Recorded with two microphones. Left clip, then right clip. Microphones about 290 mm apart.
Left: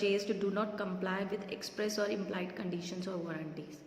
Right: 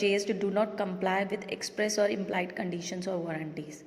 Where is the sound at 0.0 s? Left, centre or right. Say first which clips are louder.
Right 4 dB; right.